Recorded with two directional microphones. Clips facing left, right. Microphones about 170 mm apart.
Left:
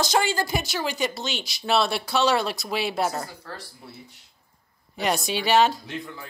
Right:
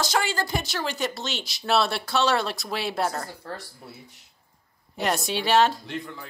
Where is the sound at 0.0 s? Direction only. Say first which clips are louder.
Left 3 dB; 20° left (ahead or behind).